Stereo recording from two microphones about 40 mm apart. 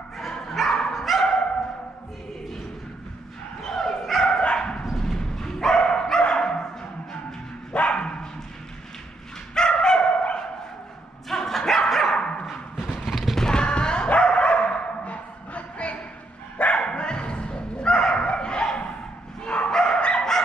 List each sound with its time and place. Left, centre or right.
0.7 s dog: centre
0.9 s dog: centre
3.6 s bow-wow: centre
4.3 s dog: left
4.9 s dog: centre
7.9 s dog: left
9.6 s dog: centre
11.2 s dog: centre
12.1 s dog: left
12.7 s clip-clop: centre
13.4 s a sound: left
14.0 s dog: left
16.8 s bow-wow: left
19.7 s dog: centre